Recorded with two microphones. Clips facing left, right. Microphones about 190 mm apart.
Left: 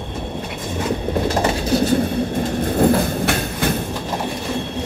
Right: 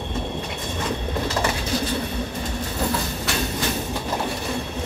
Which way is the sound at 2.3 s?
55° left (ahead or behind).